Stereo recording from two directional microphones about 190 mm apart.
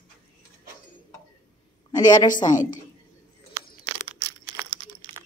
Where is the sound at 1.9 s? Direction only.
20° left (ahead or behind).